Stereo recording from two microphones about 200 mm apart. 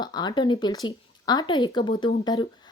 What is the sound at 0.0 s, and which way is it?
A woman's voice, 20° left (ahead or behind).